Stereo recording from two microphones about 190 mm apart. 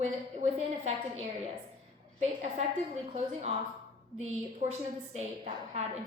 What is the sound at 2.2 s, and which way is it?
Speech, 35° right (ahead or behind).